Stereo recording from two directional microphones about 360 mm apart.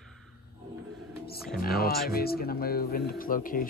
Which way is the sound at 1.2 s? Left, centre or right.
Left.